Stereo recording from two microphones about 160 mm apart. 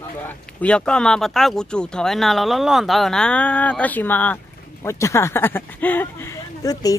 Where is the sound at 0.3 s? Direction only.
10° left (ahead or behind).